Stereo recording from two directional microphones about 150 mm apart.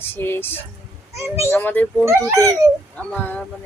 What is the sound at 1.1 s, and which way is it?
Speech, 20° right (ahead or behind).